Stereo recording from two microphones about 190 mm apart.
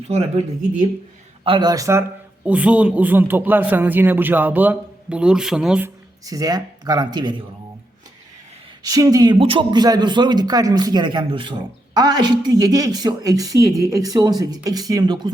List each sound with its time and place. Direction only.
1.5 s a man's voice: 20° right (ahead or behind); by 5.9 s 5° right (ahead or behind)
6.2 s speech: 20° right (ahead or behind)
8.8 s speech: 20° right (ahead or behind)